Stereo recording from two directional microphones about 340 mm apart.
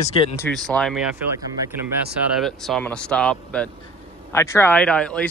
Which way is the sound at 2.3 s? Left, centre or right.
Centre.